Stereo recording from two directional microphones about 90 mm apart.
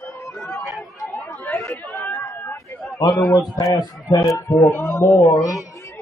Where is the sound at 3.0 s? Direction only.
50° left (ahead or behind).